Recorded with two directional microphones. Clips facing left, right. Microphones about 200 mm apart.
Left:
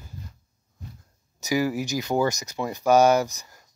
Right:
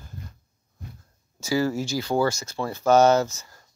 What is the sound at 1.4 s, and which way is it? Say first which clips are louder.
Speech: even; 15° left (ahead or behind).